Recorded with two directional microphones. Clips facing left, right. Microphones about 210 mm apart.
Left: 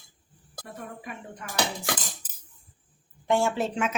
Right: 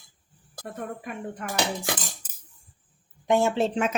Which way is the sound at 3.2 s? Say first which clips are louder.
Right 3 dB; 20° right (ahead or behind).